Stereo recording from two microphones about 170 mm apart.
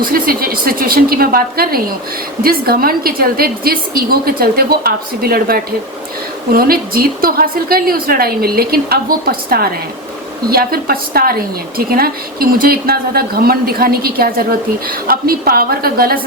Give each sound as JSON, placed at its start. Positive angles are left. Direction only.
{"t": 0.0, "sound": "a woman's voice", "side_deg": -60}